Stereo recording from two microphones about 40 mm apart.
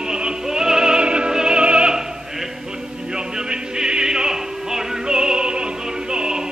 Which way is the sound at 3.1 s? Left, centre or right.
Centre.